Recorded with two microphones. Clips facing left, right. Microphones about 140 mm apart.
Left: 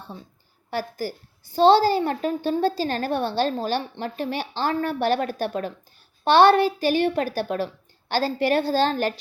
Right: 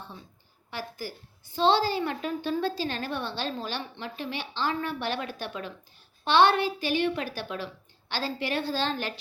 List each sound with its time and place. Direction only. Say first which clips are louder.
0.7 s a woman's voice: left 8 dB; 40° left (ahead or behind)